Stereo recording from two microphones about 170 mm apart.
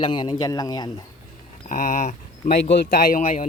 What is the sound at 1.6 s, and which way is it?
Mantra, 50° left (ahead or behind).